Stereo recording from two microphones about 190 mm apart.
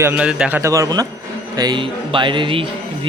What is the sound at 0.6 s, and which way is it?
A man's voice, 15° right (ahead or behind).